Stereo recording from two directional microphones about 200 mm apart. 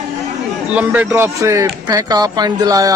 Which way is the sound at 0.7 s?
5° right (ahead or behind).